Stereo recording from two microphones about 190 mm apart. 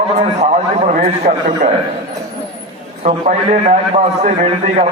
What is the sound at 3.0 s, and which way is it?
A man's voice, 35° right (ahead or behind).